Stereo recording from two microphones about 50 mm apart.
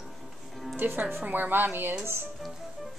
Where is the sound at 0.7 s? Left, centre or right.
Right.